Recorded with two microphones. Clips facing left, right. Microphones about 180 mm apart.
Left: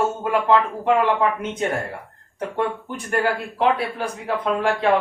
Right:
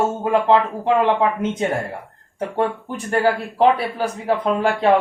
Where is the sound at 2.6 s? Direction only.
40° right (ahead or behind).